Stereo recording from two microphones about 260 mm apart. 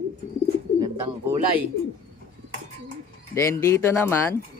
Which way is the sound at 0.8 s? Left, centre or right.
Right.